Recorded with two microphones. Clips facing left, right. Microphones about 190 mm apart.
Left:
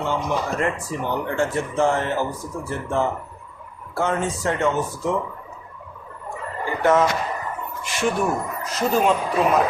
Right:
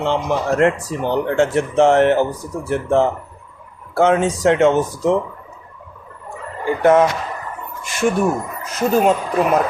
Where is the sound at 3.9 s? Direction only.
85° right.